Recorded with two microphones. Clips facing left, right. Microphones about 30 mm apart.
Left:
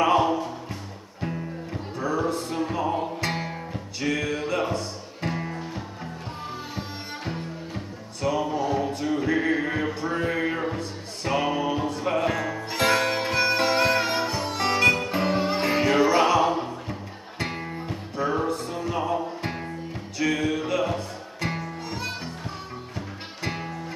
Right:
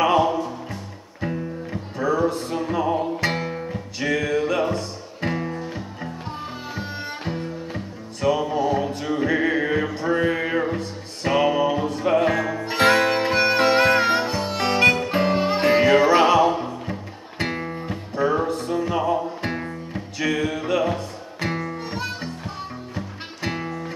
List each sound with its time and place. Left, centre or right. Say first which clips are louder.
0.0 s music: right 2 dB; centre
9.9 s a sound: right 5 dB; centre
10.7 s music: right 3 dB; centre